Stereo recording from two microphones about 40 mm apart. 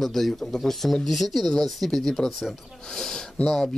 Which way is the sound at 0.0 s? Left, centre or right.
Centre.